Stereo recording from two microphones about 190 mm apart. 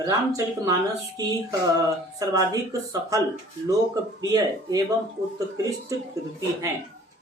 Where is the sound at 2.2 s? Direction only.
20° right (ahead or behind).